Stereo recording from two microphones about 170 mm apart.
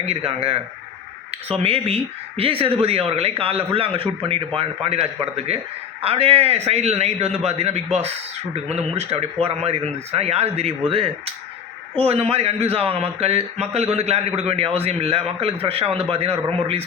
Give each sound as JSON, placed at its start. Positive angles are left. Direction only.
{"t": 0.0, "sound": "a man's voice", "side_deg": -35}